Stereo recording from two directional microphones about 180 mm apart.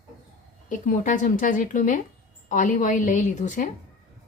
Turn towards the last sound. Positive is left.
turn(degrees=45)  # may be behind; listen again after turning